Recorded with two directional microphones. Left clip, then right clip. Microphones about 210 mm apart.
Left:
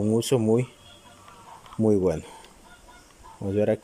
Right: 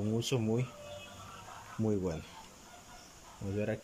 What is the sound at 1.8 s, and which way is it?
Speech, 35° left (ahead or behind).